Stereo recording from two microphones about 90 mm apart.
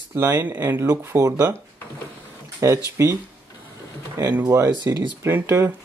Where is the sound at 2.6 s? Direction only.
35° right (ahead or behind).